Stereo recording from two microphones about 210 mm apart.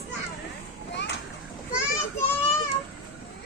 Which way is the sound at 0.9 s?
55° left (ahead or behind).